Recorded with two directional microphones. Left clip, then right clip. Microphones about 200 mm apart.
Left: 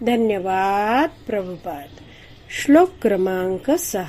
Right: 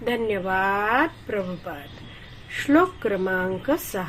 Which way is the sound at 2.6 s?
50° left (ahead or behind).